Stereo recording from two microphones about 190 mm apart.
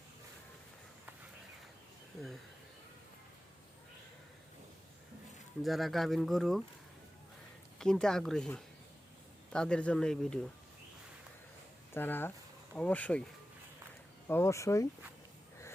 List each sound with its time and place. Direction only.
2.1 s speech: centre (ahead or behind)
5.6 s speech: centre (ahead or behind)
7.8 s speech: 5° left (ahead or behind)
11.9 s speech: 10° left (ahead or behind)
14.3 s speech: 15° left (ahead or behind)